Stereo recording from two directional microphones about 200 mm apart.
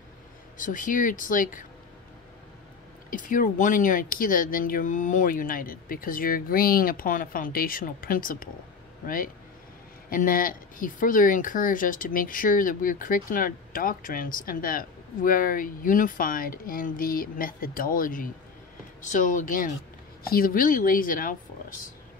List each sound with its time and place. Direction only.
0.6 s speech: 40° left (ahead or behind)
3.1 s speech: 40° left (ahead or behind)